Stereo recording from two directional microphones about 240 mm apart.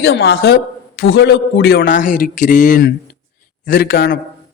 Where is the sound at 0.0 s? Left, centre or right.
Left.